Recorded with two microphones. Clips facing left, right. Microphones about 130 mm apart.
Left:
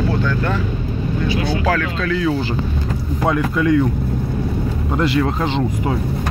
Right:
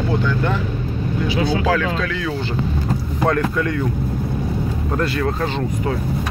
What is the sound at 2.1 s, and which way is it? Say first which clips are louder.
A man's voice: left 4 dB; 5° left (ahead or behind).